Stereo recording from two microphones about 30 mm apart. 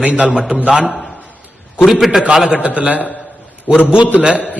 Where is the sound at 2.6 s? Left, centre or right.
Right.